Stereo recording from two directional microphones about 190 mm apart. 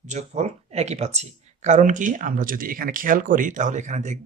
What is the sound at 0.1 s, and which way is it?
Speech, 35° right (ahead or behind).